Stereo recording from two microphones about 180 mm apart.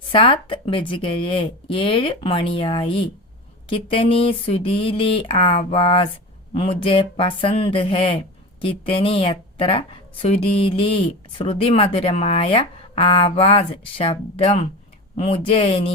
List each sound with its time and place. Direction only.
0.1 s a woman's voice: 30° left (ahead or behind)